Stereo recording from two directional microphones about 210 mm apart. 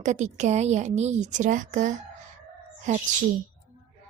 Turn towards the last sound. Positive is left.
turn(degrees=-35)  # may be behind; listen again after turning